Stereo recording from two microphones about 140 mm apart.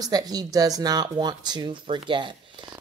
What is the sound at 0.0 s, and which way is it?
Speech, 25° right (ahead or behind).